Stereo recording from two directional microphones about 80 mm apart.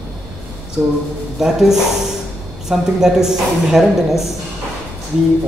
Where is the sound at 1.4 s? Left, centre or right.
Centre.